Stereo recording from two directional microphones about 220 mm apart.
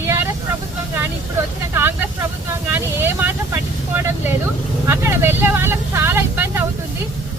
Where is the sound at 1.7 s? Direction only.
10° right (ahead or behind).